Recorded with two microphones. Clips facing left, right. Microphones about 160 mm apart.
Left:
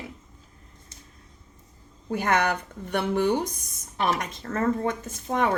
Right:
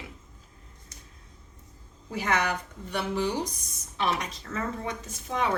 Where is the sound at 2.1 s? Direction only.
55° left (ahead or behind).